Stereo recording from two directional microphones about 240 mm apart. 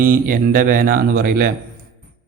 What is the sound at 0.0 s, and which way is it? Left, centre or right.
Speech, right.